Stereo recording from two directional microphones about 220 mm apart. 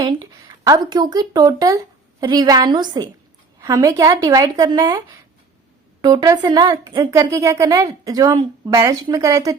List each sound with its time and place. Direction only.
0.6 s a woman's voice: 20° right (ahead or behind)